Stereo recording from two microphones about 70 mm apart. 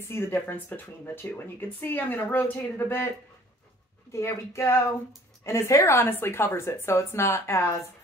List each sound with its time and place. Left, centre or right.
0.0 s speech: left
4.1 s speech: left